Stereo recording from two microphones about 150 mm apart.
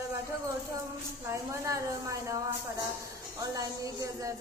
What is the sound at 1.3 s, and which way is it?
A woman's voice, 20° right (ahead or behind).